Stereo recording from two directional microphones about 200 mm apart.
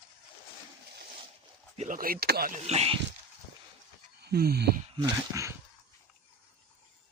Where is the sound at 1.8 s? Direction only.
45° right (ahead or behind).